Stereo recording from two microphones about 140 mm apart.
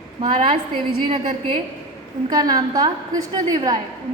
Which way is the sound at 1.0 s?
35° right (ahead or behind).